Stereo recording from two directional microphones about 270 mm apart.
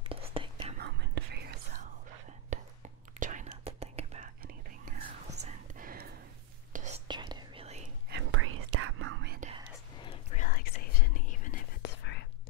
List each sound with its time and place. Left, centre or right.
0.1 s whispering: right
0.7 s whispering: right
7.1 s whispering: centre
8.1 s whispering: right
10.0 s whispering: left